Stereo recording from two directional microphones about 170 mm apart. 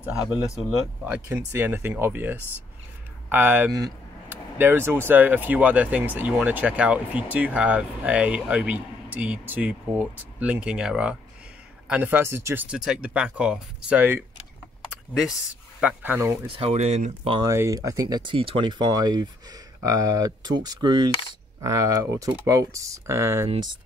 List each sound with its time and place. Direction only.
0.0 s speech: 5° right (ahead or behind)
3.7 s a sound: 15° right (ahead or behind)
5.0 s speech: 10° right (ahead or behind)
15.8 s speech: 10° right (ahead or behind)
16.4 s speech: 35° right (ahead or behind)
17.5 s speech: 15° right (ahead or behind)
23.5 s speech: 25° right (ahead or behind)